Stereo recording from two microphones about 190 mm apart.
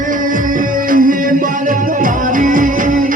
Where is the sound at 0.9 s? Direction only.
45° right (ahead or behind).